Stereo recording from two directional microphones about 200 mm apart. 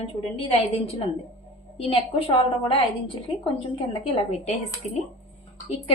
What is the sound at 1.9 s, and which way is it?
Speech, 30° left (ahead or behind).